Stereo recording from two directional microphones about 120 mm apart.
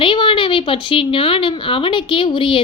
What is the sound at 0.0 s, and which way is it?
A woman's voice, 45° left (ahead or behind).